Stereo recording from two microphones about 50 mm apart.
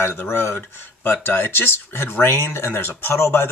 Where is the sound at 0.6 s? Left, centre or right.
Left.